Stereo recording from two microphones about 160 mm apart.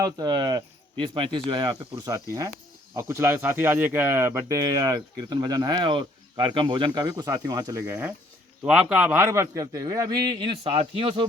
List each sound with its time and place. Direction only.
0.0 s speech: 25° right (ahead or behind)